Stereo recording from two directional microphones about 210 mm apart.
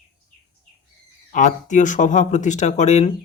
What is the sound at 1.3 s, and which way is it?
Speech, 35° left (ahead or behind).